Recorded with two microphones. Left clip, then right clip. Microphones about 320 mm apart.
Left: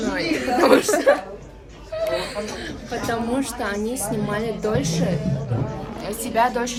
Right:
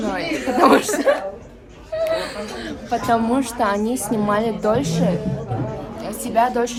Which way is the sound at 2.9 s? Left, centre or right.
Centre.